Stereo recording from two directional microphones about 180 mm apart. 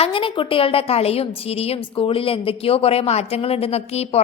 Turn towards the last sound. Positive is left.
turn(degrees=35)  # may be behind; listen again after turning